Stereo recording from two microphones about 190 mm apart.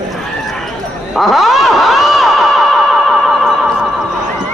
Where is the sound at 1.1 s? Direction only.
Centre (ahead or behind).